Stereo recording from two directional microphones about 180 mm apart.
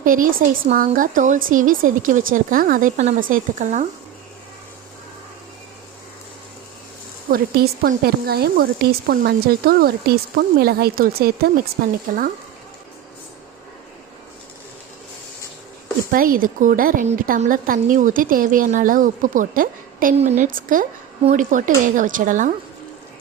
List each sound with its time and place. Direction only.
0.0 s a woman's voice: 50° right (ahead or behind)
7.3 s speech: 55° right (ahead or behind)
16.1 s a woman's voice: 50° right (ahead or behind)